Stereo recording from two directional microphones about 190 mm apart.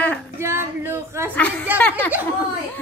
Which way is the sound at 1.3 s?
10° left (ahead or behind).